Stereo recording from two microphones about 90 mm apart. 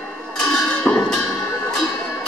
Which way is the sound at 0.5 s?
10° left (ahead or behind).